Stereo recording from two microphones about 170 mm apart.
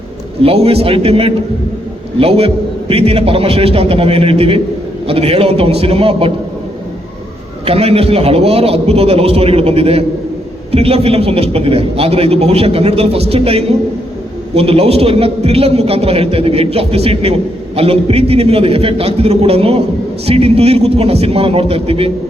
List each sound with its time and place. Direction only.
0.4 s a man's voice: 35° right (ahead or behind)
7.6 s a man's voice: 35° right (ahead or behind)